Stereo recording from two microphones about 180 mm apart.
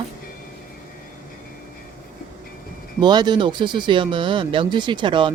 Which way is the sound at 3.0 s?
25° right (ahead or behind).